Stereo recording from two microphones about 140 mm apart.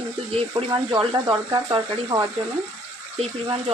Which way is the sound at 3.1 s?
40° right (ahead or behind).